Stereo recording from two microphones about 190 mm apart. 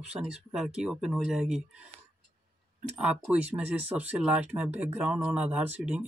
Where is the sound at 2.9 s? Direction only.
5° right (ahead or behind).